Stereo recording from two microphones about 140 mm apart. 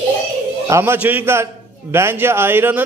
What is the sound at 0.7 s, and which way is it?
A man's voice, 15° right (ahead or behind).